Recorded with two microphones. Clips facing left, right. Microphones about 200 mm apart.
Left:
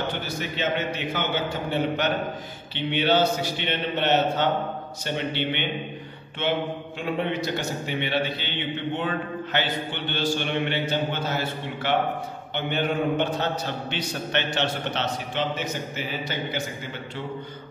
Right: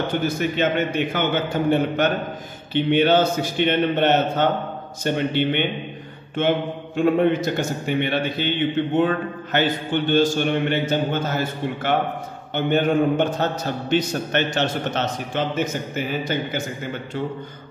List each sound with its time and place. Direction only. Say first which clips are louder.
0.4 s a man's voice: right 4 dB; 55° right (ahead or behind)